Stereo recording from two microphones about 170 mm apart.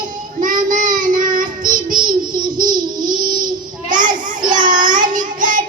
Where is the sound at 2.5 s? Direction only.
25° right (ahead or behind).